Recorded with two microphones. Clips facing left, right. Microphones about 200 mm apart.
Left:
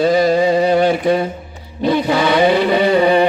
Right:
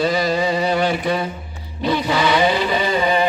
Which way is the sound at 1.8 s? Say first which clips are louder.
Left 4 dB; 50° left (ahead or behind).